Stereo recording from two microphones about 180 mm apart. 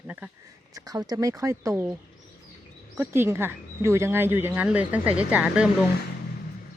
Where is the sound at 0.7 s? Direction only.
20° right (ahead or behind).